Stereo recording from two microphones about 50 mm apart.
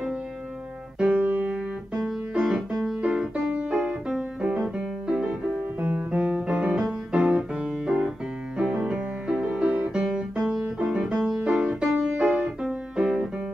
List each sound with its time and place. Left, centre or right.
1.0 s keyboard: right
2.0 s music: centre
3.5 s music: right
4.1 s piano: centre
4.6 s music: right
12.2 s music: right
12.6 s music: centre